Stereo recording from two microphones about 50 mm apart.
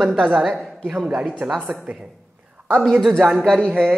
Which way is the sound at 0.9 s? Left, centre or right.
Right.